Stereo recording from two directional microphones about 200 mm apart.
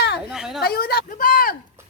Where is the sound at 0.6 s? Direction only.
50° left (ahead or behind).